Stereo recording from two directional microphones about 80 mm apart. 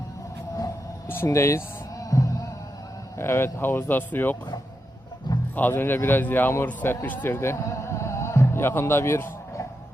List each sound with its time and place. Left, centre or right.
1.0 s music: left
3.2 s speech: left
5.5 s a man's voice: left